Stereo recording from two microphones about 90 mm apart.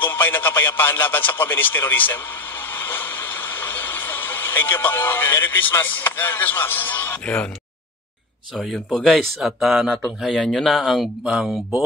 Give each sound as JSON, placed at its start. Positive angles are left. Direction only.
{"t": 0.0, "sound": "speech", "side_deg": 20}
{"t": 2.7, "sound": "a sound", "side_deg": 20}
{"t": 8.5, "sound": "speech", "side_deg": 5}